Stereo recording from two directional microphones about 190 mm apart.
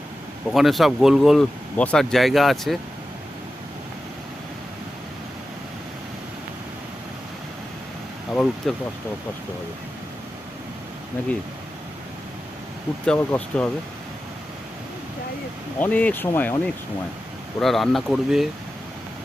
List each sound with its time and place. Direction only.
0.5 s speech: centre (ahead or behind)
8.3 s speech: 5° left (ahead or behind)
13.1 s speech: 10° left (ahead or behind)
15.8 s speech: 5° left (ahead or behind)
17.6 s speech: centre (ahead or behind)